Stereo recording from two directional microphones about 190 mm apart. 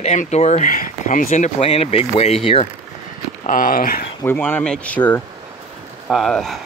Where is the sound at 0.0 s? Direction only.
35° left (ahead or behind).